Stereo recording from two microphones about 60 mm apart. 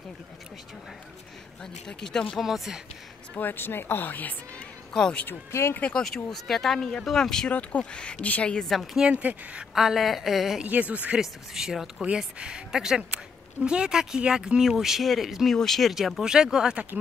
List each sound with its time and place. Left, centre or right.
1.6 s speech: centre
2.4 s speech: centre
3.3 s speech: left
4.9 s speech: centre
5.5 s speech: left
5.9 s speech: centre; by 8.5 s left
8.5 s speech: centre
8.9 s speech: centre
9.8 s speech: centre
10.6 s speech: right
11.1 s speech: centre
12.0 s speech: centre